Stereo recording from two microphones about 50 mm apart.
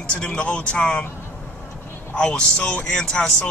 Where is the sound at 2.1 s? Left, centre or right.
Left.